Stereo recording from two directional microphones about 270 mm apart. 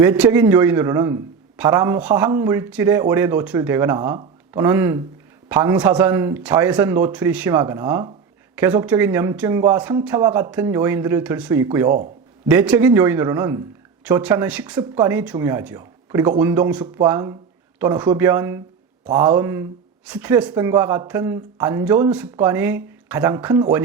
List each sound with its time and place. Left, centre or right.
0.0 s a man's voice: centre